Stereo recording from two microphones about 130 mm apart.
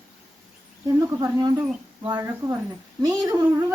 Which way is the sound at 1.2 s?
30° right (ahead or behind).